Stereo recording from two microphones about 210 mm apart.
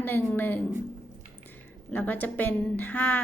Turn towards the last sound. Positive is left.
turn(degrees=5)  # may be behind; listen again after turning